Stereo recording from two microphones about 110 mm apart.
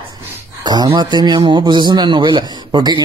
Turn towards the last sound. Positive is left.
turn(degrees=-45)  # may be behind; listen again after turning